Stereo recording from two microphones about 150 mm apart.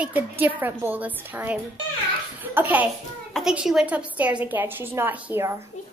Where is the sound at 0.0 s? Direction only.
10° right (ahead or behind).